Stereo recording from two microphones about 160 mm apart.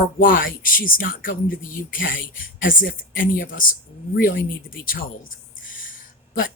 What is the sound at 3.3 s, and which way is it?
Speech, 60° left (ahead or behind).